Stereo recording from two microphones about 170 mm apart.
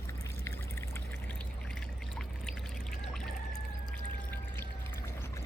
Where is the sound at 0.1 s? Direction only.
15° left (ahead or behind).